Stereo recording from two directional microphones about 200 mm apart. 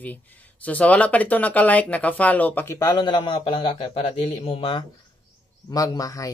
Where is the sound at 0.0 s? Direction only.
10° left (ahead or behind).